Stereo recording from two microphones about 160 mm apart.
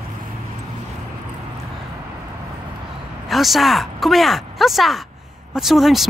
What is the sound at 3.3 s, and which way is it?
A woman's voice, centre (ahead or behind).